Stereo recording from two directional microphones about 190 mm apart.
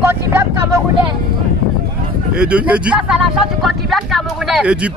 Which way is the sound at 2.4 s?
5° right (ahead or behind).